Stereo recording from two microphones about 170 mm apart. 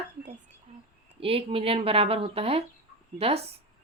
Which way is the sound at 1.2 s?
35° right (ahead or behind).